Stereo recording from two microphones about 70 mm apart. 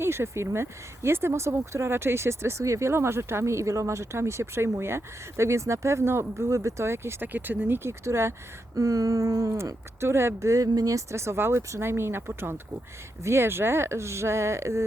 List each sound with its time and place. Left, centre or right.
0.0 s speech: right
13.2 s speech: right